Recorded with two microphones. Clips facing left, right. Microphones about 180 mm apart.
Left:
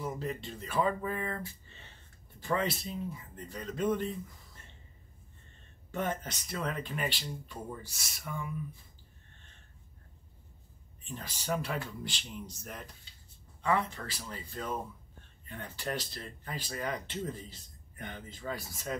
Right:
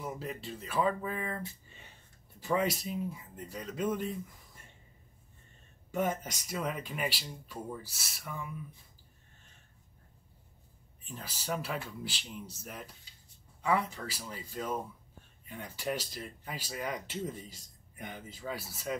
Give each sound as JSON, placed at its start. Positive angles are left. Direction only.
{"t": 0.0, "sound": "speech", "side_deg": -5}
{"t": 5.9, "sound": "speech", "side_deg": -10}
{"t": 11.1, "sound": "speech", "side_deg": 0}